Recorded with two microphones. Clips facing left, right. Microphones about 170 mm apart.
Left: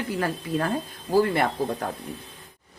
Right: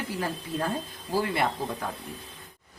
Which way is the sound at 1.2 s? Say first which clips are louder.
Left 4 dB; 45° left (ahead or behind).